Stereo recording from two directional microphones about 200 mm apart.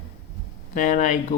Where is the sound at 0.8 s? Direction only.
35° left (ahead or behind).